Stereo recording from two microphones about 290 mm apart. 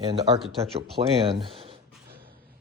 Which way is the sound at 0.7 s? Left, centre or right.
Centre.